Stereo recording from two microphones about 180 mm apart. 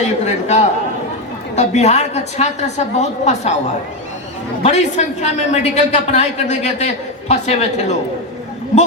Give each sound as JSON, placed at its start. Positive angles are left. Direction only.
{"t": 0.0, "sound": "a man's voice", "side_deg": 40}
{"t": 4.6, "sound": "a man's voice", "side_deg": 40}